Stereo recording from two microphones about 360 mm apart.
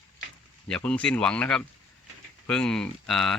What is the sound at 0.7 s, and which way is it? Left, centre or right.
Speech, centre.